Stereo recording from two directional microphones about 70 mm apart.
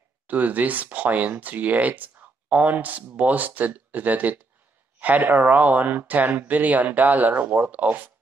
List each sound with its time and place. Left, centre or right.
0.3 s speech: right